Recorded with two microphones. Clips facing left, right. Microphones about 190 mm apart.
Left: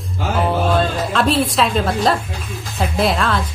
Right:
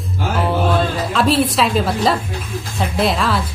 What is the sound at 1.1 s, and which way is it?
Speech, centre (ahead or behind).